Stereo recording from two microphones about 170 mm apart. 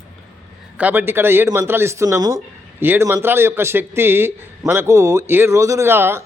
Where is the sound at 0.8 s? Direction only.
10° right (ahead or behind).